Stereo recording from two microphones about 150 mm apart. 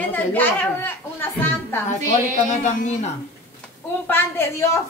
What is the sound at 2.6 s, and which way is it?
Speech, 55° left (ahead or behind).